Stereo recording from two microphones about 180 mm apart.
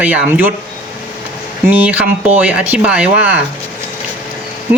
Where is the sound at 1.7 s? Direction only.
10° right (ahead or behind).